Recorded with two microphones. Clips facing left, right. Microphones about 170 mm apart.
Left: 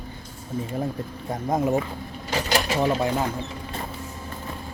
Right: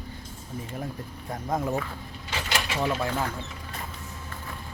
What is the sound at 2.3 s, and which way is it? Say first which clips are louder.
Mechanisms: left 6 dB; 40° left (ahead or behind).